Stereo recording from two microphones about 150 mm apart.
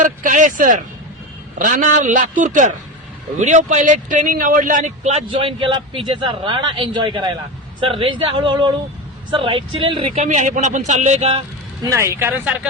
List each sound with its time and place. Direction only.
0.0 s a man's voice: 60° right (ahead or behind); by 10.2 s 35° right (ahead or behind)
10.2 s a man's voice: 55° right (ahead or behind)
11.9 s speech: 20° right (ahead or behind)